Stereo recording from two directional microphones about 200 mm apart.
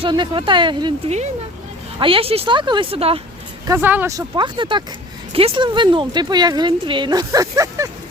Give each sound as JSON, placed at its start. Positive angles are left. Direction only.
{"t": 0.0, "sound": "speech", "side_deg": -25}
{"t": 3.7, "sound": "speech", "side_deg": -10}
{"t": 4.4, "sound": "speech", "side_deg": -25}